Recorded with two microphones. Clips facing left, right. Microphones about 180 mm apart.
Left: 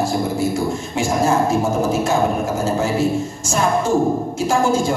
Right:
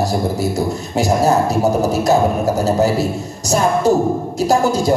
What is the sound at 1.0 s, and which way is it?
Music, 40° right (ahead or behind).